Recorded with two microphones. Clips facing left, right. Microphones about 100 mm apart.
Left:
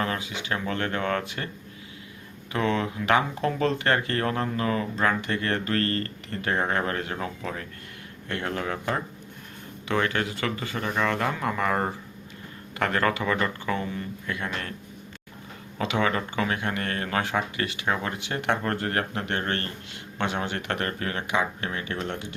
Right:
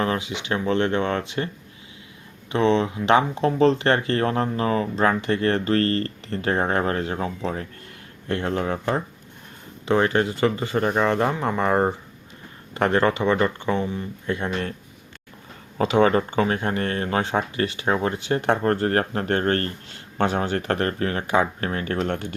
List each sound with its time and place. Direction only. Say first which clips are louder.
0.0 s speech: right 5 dB; 25° right (ahead or behind)
2.5 s speech: right 6 dB; 25° right (ahead or behind)
9.8 s speech: right 6 dB; 30° right (ahead or behind)
15.8 s speech: right 7 dB; 35° right (ahead or behind)